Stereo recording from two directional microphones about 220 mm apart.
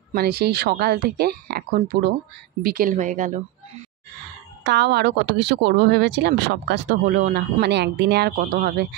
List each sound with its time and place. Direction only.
0.1 s speech: 45° right (ahead or behind)
4.6 s speech: 50° right (ahead or behind)